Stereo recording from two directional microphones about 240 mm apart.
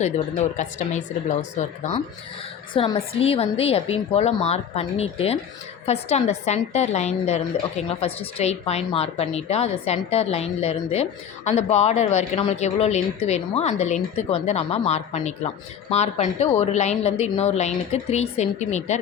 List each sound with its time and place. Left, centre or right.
0.0 s a woman's voice: left